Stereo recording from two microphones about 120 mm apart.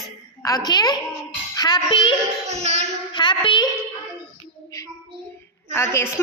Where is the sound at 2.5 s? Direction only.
65° right (ahead or behind).